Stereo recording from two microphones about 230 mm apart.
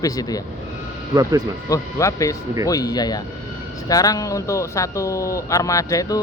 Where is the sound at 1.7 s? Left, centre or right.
Centre.